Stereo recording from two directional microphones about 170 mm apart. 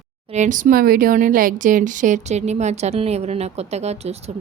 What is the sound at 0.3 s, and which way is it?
Speech, 45° right (ahead or behind).